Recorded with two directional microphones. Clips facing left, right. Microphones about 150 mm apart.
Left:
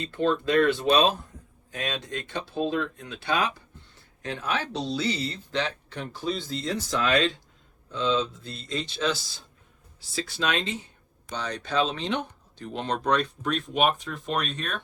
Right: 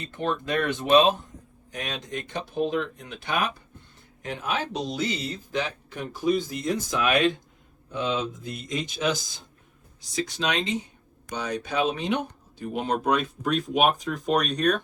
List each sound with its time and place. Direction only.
0.0 s speech: 20° right (ahead or behind); by 14.8 s centre (ahead or behind)